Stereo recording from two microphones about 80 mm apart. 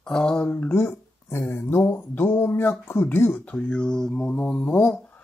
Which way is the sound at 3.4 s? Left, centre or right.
Centre.